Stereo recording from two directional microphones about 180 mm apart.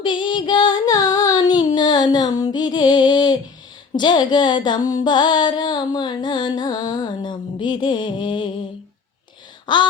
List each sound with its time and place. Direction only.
0.0 s female singing: 25° left (ahead or behind)
3.9 s music: 25° left (ahead or behind)
9.7 s music: 25° left (ahead or behind)